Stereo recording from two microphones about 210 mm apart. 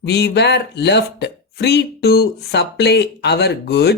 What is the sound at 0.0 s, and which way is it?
Speech, 55° left (ahead or behind).